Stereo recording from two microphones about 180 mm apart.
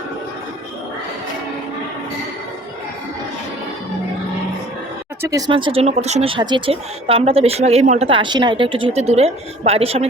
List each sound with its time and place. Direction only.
5.2 s speech: 20° right (ahead or behind)